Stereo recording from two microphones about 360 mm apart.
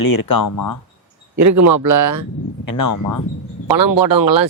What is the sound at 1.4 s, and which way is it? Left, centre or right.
Speech, right.